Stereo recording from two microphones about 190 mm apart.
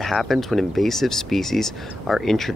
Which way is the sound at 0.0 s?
Centre (ahead or behind).